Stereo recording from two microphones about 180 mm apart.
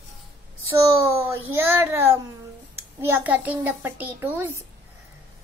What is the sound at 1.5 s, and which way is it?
Child singing, 10° right (ahead or behind).